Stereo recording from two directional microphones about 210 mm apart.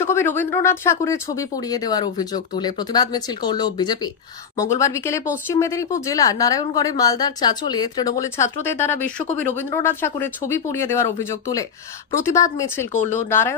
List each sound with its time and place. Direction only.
0.0 s a woman's voice: 10° left (ahead or behind)